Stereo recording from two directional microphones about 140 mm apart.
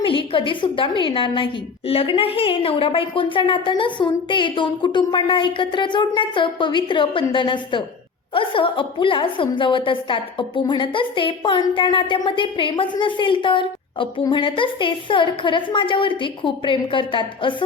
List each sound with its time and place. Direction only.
0.0 s a woman's voice: 40° left (ahead or behind)